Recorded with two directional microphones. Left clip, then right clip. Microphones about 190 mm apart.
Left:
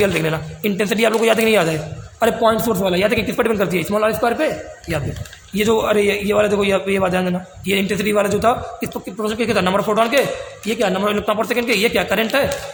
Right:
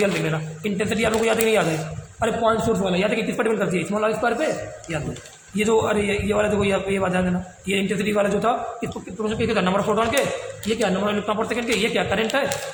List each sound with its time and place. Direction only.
0.0 s a man's voice: 45° left (ahead or behind)
5.5 s a man's voice: 40° left (ahead or behind)